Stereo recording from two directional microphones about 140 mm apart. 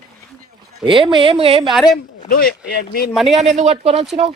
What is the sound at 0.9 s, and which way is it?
Speech, 35° right (ahead or behind).